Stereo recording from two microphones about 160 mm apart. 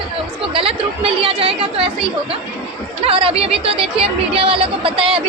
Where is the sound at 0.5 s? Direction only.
35° right (ahead or behind).